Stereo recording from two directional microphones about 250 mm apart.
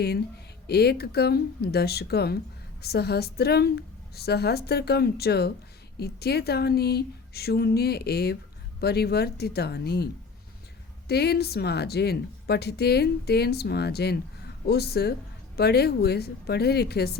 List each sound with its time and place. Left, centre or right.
0.7 s speech: left
11.1 s speech: left